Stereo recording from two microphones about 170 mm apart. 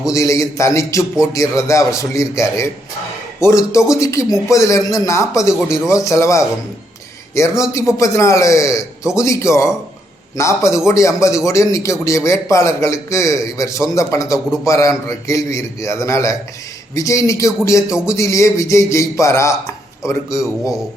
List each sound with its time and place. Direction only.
0.0 s a man's voice: 20° left (ahead or behind)
5.5 s speech: 5° right (ahead or behind)
5.9 s a man's voice: 20° left (ahead or behind)
17.9 s speech: 5° right (ahead or behind)
18.2 s a man's voice: 15° left (ahead or behind)